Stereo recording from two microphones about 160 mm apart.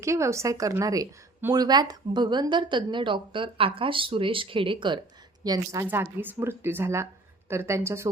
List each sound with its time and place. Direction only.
0.0 s a woman's voice: 20° right (ahead or behind)